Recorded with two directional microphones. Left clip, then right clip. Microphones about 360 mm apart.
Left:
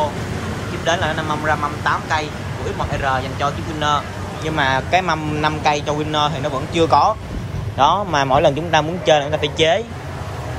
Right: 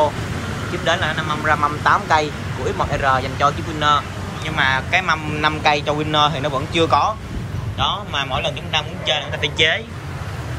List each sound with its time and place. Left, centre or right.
0.8 s a man's voice: centre